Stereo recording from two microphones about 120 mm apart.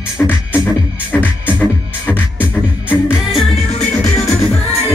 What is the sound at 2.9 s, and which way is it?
Music, 5° right (ahead or behind).